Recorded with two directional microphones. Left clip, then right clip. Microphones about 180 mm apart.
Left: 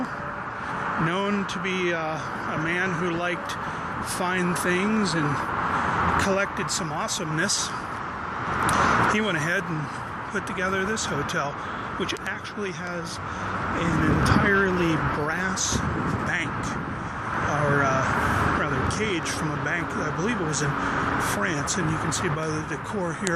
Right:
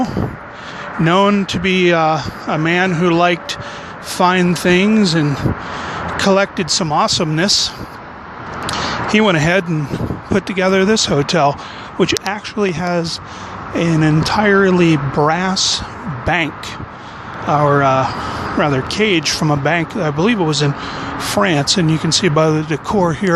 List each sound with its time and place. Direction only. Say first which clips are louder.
1.0 s speech: right 12 dB; 45° right (ahead or behind)
8.6 s a sound: right 1 dB; 45° right (ahead or behind)
10.3 s speech: right 12 dB; 45° right (ahead or behind)
17.5 s speech: right 12 dB; 35° right (ahead or behind)